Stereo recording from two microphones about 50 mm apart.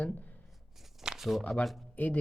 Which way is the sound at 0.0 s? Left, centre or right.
Left.